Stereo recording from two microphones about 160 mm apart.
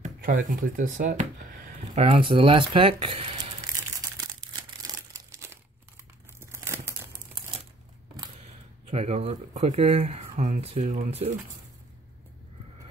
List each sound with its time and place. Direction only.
0.0 s speech: 60° right (ahead or behind)
2.0 s speech: 35° right (ahead or behind)
4.8 s crumpling: 20° right (ahead or behind)
8.8 s speech: 45° right (ahead or behind)